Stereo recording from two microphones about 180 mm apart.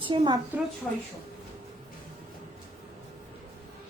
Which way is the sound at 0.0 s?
30° right (ahead or behind).